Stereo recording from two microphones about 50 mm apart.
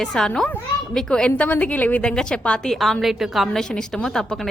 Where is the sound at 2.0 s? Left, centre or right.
Centre.